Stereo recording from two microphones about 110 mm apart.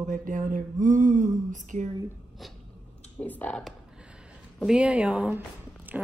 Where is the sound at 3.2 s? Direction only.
15° left (ahead or behind).